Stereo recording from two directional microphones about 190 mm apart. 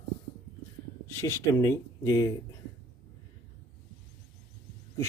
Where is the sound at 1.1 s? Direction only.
15° left (ahead or behind).